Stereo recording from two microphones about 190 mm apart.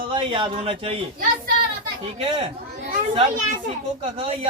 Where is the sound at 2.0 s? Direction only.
30° right (ahead or behind).